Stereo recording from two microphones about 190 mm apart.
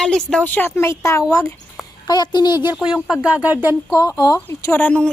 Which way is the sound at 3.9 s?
20° left (ahead or behind).